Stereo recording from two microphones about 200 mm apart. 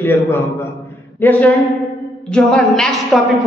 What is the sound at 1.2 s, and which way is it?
A woman's voice, 10° left (ahead or behind).